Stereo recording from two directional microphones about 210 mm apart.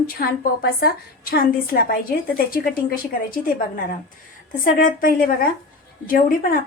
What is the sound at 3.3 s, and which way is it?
Speech, 40° left (ahead or behind).